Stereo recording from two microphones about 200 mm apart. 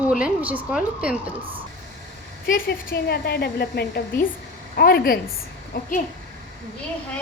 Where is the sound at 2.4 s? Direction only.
45° left (ahead or behind).